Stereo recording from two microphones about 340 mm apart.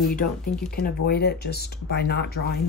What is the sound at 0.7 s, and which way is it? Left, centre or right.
Speech, left.